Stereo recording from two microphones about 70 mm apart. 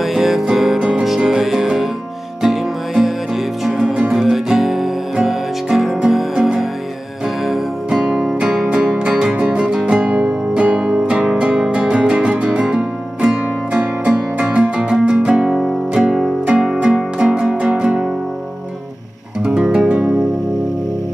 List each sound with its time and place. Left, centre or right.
0.0 s music: centre
0.7 s music: centre
15.5 s music: centre
19.4 s music: centre